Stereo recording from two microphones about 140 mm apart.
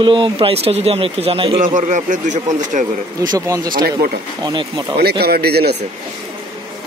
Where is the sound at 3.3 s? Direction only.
25° right (ahead or behind).